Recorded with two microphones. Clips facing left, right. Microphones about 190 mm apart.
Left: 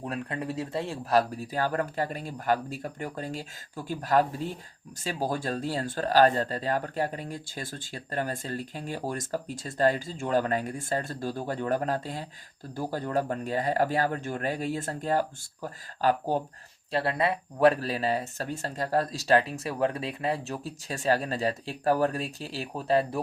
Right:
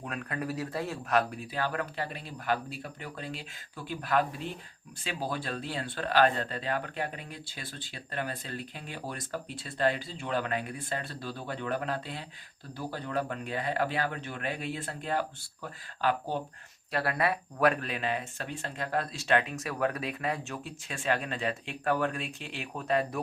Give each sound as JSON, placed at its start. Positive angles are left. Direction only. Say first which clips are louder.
{"t": 0.0, "sound": "speech", "louder": "left 3 dB", "side_deg": 30}
{"t": 16.9, "sound": "speech", "louder": "left 2 dB", "side_deg": 25}